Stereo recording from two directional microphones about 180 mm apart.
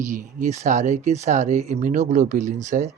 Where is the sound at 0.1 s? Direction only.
40° right (ahead or behind).